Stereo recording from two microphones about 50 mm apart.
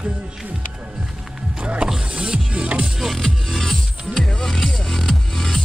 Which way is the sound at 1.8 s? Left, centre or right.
Centre.